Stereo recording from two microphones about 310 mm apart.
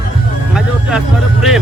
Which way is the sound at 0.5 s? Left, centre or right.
Centre.